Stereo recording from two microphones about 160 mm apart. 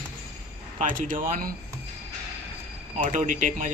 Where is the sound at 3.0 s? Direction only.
50° right (ahead or behind).